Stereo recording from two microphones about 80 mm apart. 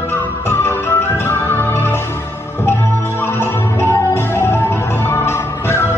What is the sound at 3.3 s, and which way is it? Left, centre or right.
Music, left.